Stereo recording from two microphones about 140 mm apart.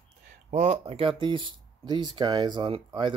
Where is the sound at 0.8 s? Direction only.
40° right (ahead or behind).